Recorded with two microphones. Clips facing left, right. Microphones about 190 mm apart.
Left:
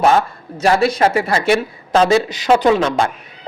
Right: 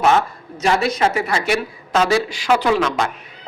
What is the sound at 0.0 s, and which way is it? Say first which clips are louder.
A man's voice: left 2 dB; 30° left (ahead or behind).